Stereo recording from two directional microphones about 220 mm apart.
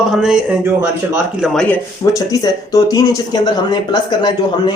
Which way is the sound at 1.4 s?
5° left (ahead or behind).